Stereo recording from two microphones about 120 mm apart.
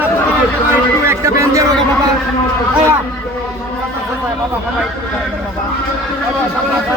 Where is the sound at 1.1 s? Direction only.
25° right (ahead or behind).